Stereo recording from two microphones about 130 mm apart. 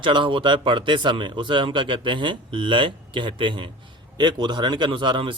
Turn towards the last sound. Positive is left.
turn(degrees=-40)  # may be behind; listen again after turning